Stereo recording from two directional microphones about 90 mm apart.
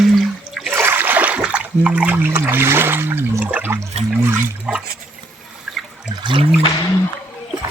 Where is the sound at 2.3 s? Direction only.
25° right (ahead or behind).